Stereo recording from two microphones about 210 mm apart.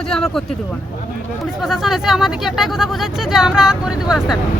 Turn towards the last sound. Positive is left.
turn(degrees=0)  # may be behind; listen again after turning